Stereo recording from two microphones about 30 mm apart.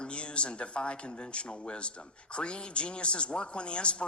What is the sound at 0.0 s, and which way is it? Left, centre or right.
Speech, left.